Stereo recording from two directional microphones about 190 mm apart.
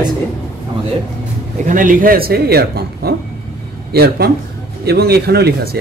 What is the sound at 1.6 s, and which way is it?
Speech, 45° right (ahead or behind).